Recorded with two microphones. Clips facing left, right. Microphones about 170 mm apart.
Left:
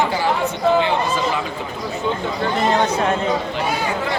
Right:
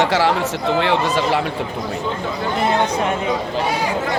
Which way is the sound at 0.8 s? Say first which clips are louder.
Right 2 dB; 80° right.